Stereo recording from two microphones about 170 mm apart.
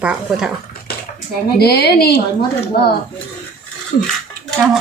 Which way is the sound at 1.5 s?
70° left (ahead or behind).